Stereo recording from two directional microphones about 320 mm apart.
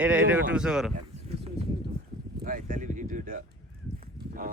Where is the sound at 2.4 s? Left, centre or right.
Right.